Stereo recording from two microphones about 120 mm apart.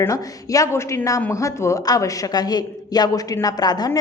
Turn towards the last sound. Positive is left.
turn(degrees=35)  # may be behind; listen again after turning